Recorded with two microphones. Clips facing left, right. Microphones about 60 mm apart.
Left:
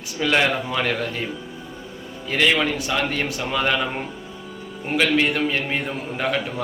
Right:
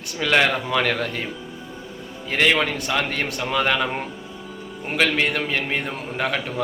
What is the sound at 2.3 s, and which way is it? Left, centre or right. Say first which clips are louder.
A man's voice: even; right.